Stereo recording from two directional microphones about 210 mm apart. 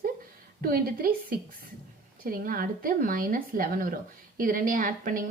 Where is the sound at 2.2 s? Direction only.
40° right (ahead or behind).